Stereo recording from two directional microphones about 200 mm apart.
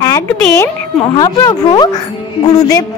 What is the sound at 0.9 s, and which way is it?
A woman's voice, 25° left (ahead or behind).